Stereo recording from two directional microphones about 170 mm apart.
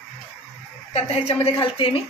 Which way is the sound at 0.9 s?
40° left (ahead or behind).